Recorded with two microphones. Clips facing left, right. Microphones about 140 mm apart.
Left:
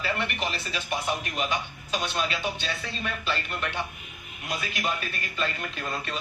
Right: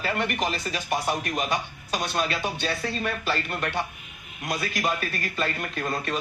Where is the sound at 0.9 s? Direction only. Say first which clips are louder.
Right 3 dB; 45° right (ahead or behind).